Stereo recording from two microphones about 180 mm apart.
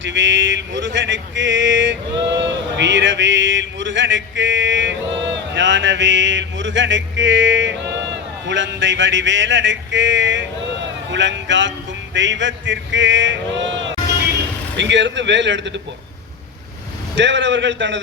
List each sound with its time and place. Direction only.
0.0 s a sound: 90° right
12.1 s a man's voice: 90° right
17.2 s a man's voice: 90° right